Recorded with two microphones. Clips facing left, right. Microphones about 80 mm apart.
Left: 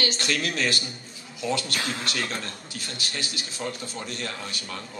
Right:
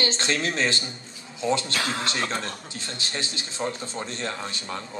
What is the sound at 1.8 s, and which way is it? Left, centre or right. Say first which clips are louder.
Speech: right 3 dB; right.